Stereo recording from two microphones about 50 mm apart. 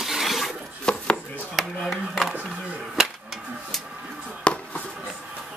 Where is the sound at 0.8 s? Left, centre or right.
Left.